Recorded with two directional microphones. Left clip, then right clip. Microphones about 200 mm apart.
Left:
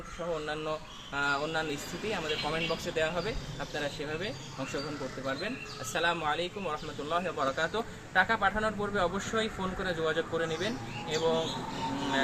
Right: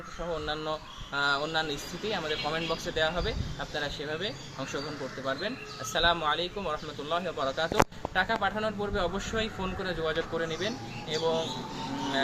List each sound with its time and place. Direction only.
0.4 s a man's voice: 15° right (ahead or behind)